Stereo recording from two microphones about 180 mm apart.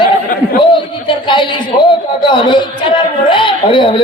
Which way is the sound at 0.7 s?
25° left (ahead or behind).